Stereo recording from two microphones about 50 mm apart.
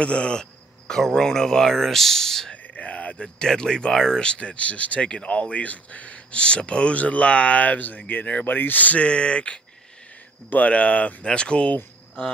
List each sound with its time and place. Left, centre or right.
0.0 s speech: left
2.5 s a sound: left
3.3 s speech: centre